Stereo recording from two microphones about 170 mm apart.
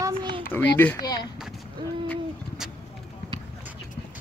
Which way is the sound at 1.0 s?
25° left (ahead or behind).